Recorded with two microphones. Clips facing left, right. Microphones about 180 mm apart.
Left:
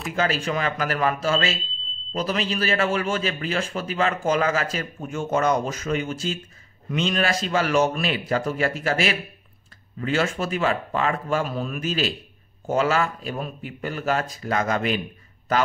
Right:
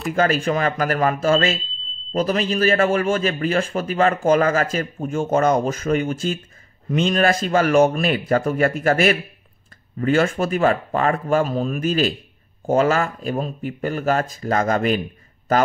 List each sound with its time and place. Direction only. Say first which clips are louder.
0.1 s a man's voice: right 5 dB; 50° right (ahead or behind)